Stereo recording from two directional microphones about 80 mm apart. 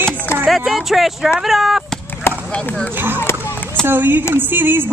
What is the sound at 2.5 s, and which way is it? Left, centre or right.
Speech, centre.